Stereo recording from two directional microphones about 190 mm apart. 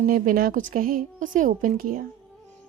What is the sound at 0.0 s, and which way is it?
Speech, 50° right (ahead or behind).